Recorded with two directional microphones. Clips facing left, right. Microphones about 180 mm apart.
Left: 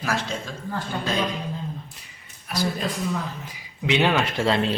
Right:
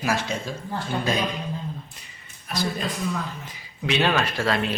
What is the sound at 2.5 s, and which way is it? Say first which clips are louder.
A man's voice: left 1 dB; 5° left (ahead or behind).